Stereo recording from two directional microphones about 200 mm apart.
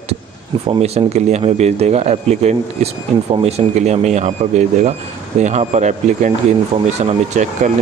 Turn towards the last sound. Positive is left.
turn(degrees=-35)  # may be behind; listen again after turning